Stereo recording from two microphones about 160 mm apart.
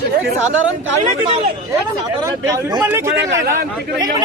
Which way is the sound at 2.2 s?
20° right (ahead or behind).